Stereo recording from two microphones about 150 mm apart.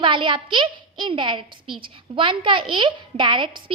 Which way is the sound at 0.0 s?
35° right (ahead or behind).